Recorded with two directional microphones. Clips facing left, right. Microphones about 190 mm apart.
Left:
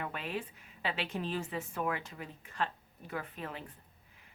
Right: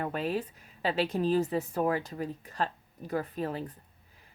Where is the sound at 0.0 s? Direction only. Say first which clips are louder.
Right 7 dB; 40° right (ahead or behind).